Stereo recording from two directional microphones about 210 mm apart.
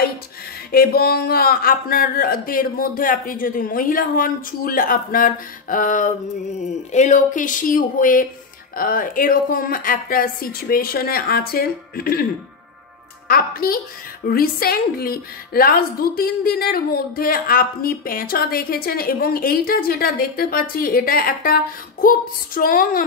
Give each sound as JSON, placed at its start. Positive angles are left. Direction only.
{"t": 0.7, "sound": "a woman's voice", "side_deg": 45}
{"t": 13.3, "sound": "a woman's voice", "side_deg": 45}